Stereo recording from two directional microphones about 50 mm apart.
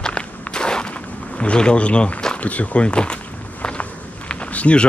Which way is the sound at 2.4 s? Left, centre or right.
Left.